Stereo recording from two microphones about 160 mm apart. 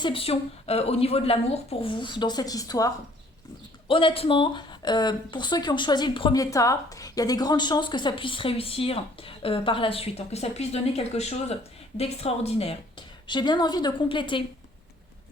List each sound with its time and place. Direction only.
0.0 s a woman's voice: 35° left (ahead or behind)
3.8 s a woman's voice: 35° left (ahead or behind)